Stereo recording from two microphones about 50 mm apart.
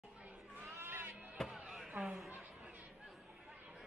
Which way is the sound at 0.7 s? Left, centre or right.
Right.